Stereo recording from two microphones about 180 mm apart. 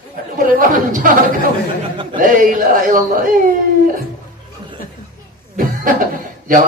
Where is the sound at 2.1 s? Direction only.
50° right (ahead or behind).